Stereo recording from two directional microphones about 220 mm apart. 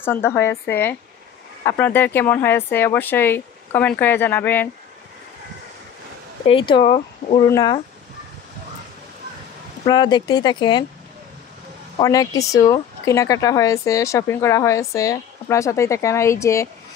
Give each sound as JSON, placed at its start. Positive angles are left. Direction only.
{"t": 0.0, "sound": "speech", "side_deg": 10}
{"t": 6.4, "sound": "speech", "side_deg": 25}
{"t": 9.8, "sound": "speech", "side_deg": 20}
{"t": 12.0, "sound": "speech", "side_deg": 15}